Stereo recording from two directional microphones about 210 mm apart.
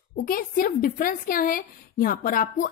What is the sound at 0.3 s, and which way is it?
A woman's voice, 40° left (ahead or behind).